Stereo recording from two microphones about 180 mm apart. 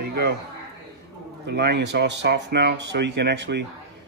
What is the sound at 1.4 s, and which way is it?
Speech, 70° right (ahead or behind).